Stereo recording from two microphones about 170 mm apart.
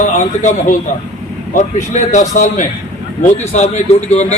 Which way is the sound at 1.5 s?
45° left (ahead or behind).